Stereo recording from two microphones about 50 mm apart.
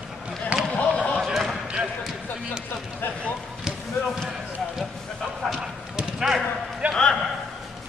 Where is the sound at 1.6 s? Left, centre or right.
Right.